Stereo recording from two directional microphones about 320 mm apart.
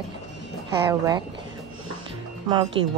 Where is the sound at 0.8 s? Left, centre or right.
Centre.